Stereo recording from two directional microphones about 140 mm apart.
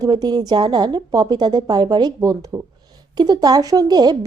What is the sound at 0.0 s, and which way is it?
A woman's voice, 30° right (ahead or behind).